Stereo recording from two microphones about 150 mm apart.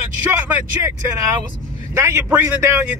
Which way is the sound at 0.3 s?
10° right (ahead or behind).